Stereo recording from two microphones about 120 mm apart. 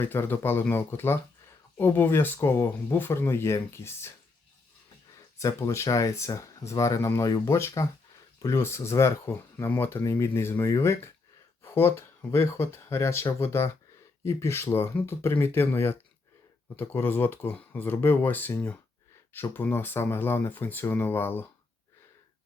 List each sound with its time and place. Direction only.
0.0 s speech: 20° left (ahead or behind)
5.4 s speech: 25° left (ahead or behind)